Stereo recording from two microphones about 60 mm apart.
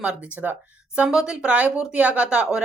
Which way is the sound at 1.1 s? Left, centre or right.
Centre.